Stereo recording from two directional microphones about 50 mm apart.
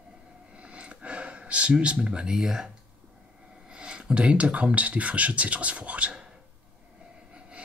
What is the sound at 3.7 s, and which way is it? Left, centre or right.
Speech, centre.